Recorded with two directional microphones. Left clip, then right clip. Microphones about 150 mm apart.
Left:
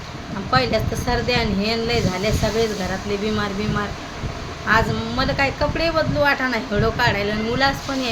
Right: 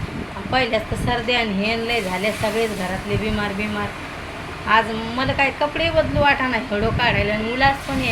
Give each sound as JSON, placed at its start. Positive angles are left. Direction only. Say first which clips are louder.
{"t": 0.5, "sound": "speech", "louder": "left 1 dB", "side_deg": 15}
{"t": 4.7, "sound": "speech", "louder": "right 1 dB", "side_deg": 15}